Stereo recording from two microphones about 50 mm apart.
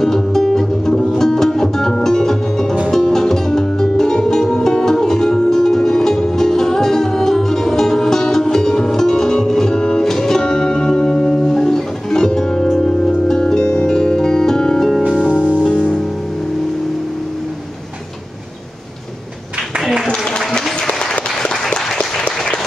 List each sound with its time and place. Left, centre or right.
0.0 s music: centre
15.6 s music: left
20.1 s a sound: centre
20.8 s applause: centre